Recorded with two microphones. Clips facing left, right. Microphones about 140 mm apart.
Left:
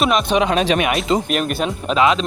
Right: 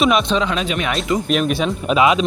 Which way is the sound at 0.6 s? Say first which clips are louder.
Left 5 dB; 90° left.